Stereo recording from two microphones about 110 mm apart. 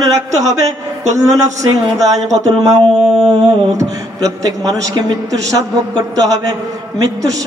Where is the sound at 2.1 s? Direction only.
90° right.